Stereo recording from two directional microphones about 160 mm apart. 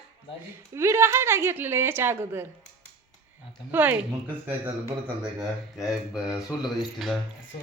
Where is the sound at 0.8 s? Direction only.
15° right (ahead or behind).